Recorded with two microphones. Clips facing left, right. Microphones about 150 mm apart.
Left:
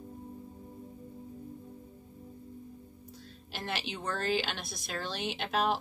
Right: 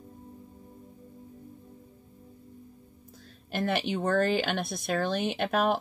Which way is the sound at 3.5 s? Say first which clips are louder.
Right 9 dB; 55° right (ahead or behind).